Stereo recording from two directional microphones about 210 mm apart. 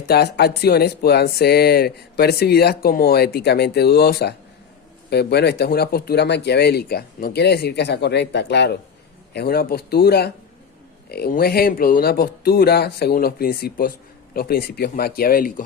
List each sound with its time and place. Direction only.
0.1 s speech: 50° left (ahead or behind)